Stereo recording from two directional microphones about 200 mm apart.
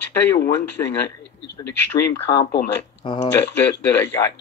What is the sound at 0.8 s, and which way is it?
Speech, 20° left (ahead or behind).